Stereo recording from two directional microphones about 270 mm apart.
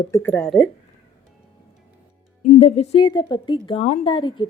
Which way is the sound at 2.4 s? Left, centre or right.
Left.